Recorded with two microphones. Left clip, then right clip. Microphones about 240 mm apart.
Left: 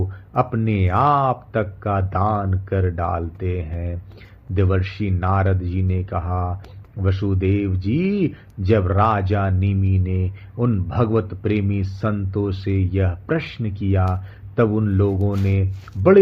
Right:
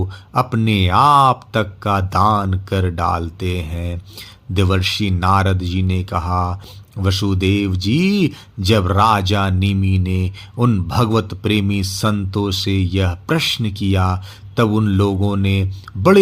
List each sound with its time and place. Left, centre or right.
0.3 s speech: right